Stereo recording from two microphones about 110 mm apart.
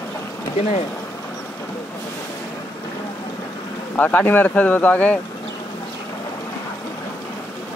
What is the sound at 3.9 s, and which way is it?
Speech, 15° left (ahead or behind).